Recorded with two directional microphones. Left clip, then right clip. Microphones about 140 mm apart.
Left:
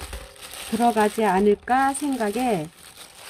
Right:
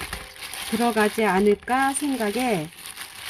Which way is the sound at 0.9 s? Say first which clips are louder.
Left 1 dB; 5° left (ahead or behind).